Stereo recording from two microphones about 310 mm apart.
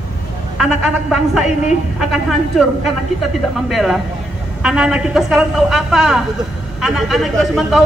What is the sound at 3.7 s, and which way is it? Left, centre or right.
A man's voice, centre.